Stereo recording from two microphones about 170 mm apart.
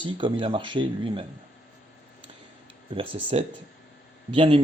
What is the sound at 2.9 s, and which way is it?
Speech, 30° right (ahead or behind).